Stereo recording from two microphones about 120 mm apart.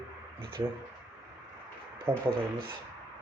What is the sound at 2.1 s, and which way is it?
Speech, 15° right (ahead or behind).